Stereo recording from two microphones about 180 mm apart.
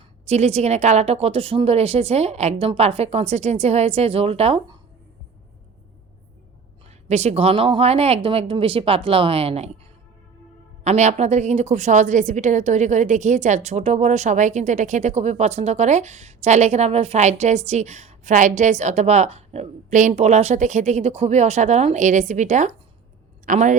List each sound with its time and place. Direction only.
0.3 s a woman's voice: 35° right (ahead or behind)
7.1 s a woman's voice: 35° right (ahead or behind)
10.8 s a woman's voice: 40° right (ahead or behind)